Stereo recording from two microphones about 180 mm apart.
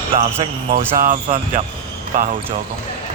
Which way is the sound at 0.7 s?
50° right (ahead or behind).